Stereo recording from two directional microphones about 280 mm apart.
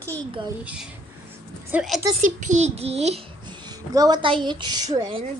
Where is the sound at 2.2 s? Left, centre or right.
Right.